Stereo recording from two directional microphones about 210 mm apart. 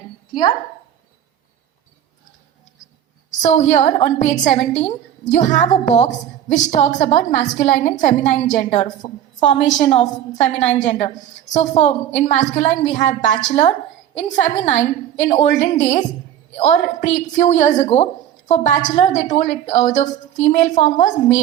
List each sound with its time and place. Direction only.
3.4 s a woman's voice: 30° left (ahead or behind)